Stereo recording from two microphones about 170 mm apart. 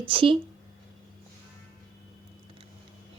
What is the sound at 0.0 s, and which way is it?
Speech, 30° right (ahead or behind).